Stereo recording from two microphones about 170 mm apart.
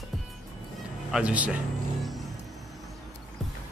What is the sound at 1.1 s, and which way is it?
Speech, 5° right (ahead or behind).